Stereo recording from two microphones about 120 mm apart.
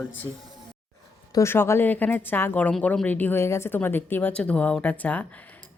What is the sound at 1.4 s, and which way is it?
A woman's voice, 20° left (ahead or behind).